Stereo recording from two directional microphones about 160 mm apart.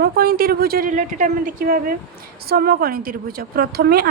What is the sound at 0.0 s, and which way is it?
A woman's voice, 70° right (ahead or behind).